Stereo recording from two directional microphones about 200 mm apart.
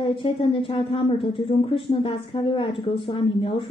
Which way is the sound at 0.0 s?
25° left (ahead or behind).